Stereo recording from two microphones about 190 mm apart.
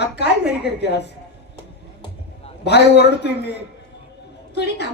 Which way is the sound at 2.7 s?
60° left (ahead or behind).